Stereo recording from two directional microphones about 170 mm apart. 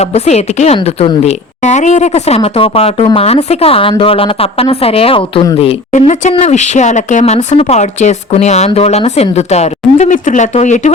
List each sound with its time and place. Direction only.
0.0 s speech: 40° left (ahead or behind)